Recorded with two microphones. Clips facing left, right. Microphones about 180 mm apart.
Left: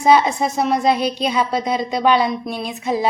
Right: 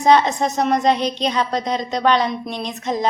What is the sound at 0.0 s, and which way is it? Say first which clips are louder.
Speech: even; 10° left (ahead or behind).